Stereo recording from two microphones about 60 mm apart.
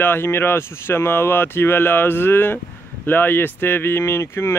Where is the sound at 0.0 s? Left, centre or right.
Left.